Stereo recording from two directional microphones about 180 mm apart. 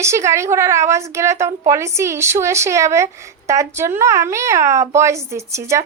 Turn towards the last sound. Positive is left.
turn(degrees=-15)  # may be behind; listen again after turning